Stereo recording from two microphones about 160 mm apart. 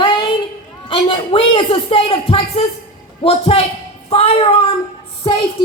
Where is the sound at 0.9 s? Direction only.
30° left (ahead or behind).